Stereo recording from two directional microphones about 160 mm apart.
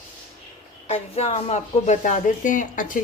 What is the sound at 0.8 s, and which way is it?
Speech, 40° left (ahead or behind).